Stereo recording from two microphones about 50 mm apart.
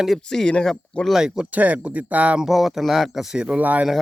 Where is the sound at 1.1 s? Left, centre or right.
Centre.